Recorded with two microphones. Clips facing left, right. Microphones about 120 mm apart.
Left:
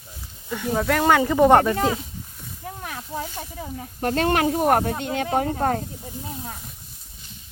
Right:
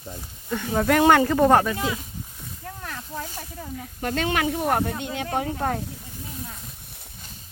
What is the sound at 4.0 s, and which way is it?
Speech, 40° left (ahead or behind).